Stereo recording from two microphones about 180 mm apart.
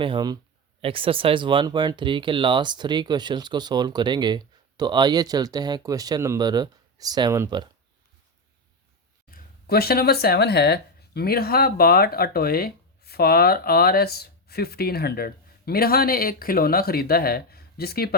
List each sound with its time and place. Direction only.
0.0 s speech: 25° right (ahead or behind)
9.3 s speech: 60° left (ahead or behind)